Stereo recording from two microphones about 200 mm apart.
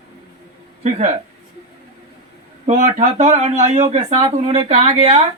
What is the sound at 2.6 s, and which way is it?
Speech, 40° right (ahead or behind).